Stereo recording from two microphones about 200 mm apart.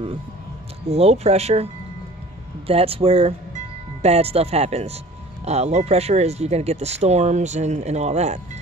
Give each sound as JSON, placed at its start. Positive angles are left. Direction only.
{"t": 0.8, "sound": "speech", "side_deg": -30}